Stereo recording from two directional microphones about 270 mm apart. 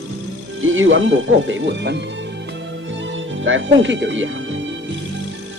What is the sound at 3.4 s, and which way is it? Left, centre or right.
Speech, right.